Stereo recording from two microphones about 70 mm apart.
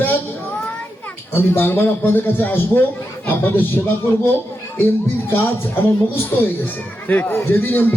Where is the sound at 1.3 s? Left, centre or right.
Left.